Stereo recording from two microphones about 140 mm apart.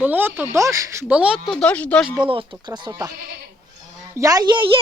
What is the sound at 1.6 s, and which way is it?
Speech, 10° left (ahead or behind).